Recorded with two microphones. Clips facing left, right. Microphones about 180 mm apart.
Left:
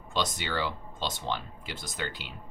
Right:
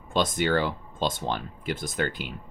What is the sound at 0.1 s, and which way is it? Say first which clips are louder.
Speech: right 8 dB; 50° right (ahead or behind).